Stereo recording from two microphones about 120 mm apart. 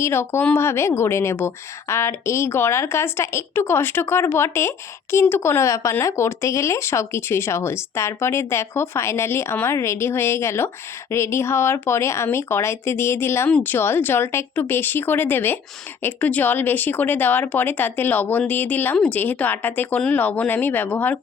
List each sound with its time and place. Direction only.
0.0 s speech: 20° left (ahead or behind)